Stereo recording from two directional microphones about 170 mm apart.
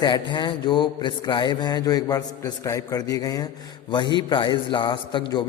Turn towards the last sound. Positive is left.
turn(degrees=25)  # may be behind; listen again after turning